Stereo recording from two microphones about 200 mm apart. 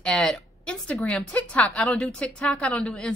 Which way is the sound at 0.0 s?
5° left (ahead or behind).